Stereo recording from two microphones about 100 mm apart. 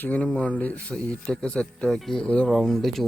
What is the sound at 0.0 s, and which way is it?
Speech, 15° left (ahead or behind).